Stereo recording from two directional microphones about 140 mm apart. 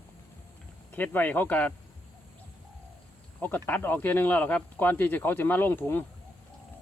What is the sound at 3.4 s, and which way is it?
Speech, 15° left (ahead or behind).